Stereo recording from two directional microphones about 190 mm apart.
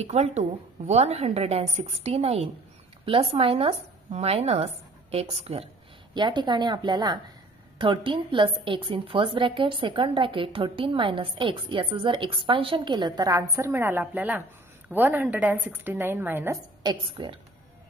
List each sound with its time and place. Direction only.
0.0 s a woman's voice: 35° right (ahead or behind); by 16.5 s 10° right (ahead or behind)
16.8 s a woman's voice: 25° right (ahead or behind)